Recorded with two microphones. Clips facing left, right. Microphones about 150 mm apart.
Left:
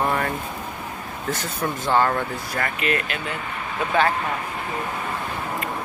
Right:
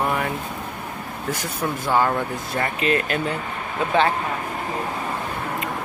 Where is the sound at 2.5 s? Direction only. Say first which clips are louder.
Right 3 dB; 30° right (ahead or behind).